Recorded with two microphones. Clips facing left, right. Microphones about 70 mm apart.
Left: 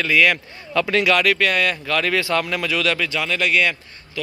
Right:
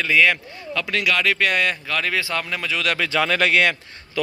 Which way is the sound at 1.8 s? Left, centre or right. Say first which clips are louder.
Left 3 dB; centre.